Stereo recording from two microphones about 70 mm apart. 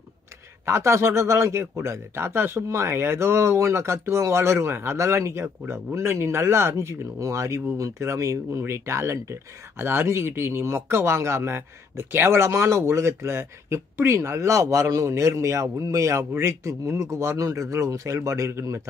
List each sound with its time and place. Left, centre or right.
0.7 s a man's voice: right